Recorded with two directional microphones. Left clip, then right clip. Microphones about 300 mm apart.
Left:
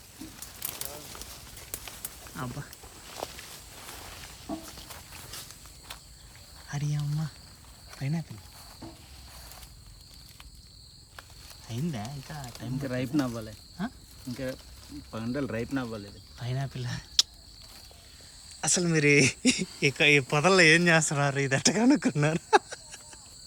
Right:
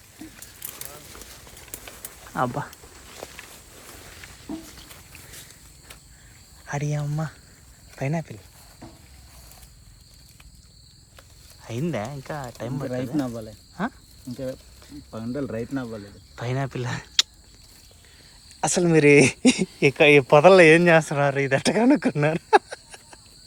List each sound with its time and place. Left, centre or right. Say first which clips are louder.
1.7 s a sound: right 1 dB; centre
3.3 s walk: right 2 dB; centre
4.8 s a sound: even; centre
6.7 s speech: right 8 dB; centre
11.7 s speech: right 9 dB; centre
15.1 s speech: right 3 dB; centre
16.3 s speech: right 10 dB; centre
18.6 s speech: right 8 dB; centre